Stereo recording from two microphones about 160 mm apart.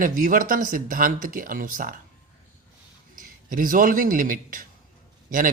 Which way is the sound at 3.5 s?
60° right (ahead or behind).